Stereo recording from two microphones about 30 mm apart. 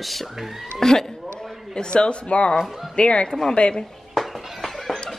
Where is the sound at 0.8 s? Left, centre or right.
Centre.